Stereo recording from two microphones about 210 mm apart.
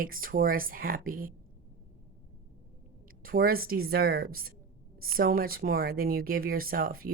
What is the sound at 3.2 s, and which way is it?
A woman's voice, 45° right (ahead or behind).